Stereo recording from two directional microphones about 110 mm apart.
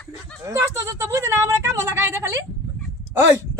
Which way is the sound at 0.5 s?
25° right (ahead or behind).